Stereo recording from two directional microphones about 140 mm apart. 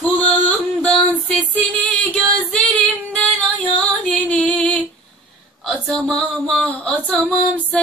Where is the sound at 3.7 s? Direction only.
5° left (ahead or behind).